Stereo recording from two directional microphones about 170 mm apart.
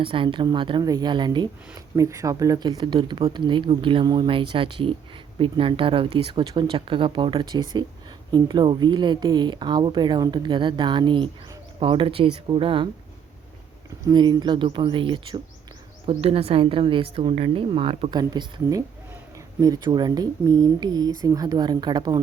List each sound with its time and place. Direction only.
0.0 s a woman's voice: 30° right (ahead or behind)
14.1 s a woman's voice: 25° right (ahead or behind)